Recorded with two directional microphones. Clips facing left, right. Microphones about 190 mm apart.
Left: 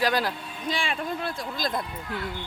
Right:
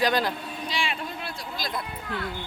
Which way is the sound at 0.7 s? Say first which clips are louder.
Left 4 dB; 50° left (ahead or behind).